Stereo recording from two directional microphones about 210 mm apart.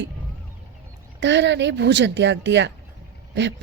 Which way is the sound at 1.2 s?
55° right (ahead or behind).